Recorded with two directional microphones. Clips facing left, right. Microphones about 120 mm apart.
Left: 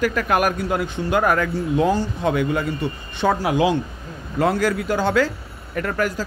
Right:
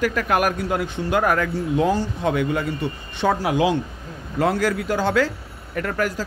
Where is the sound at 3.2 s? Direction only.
45° left (ahead or behind).